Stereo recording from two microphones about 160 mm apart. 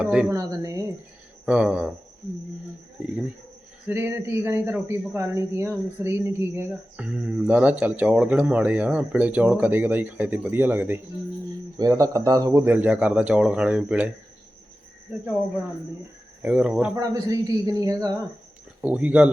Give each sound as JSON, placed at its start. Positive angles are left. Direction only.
{"t": 0.0, "sound": "speech", "side_deg": -5}
{"t": 0.3, "sound": "speech", "side_deg": -20}
{"t": 1.5, "sound": "speech", "side_deg": -5}
{"t": 3.8, "sound": "speech", "side_deg": -15}
{"t": 16.4, "sound": "speech", "side_deg": -5}
{"t": 16.9, "sound": "a woman's voice", "side_deg": -20}
{"t": 18.8, "sound": "speech", "side_deg": -10}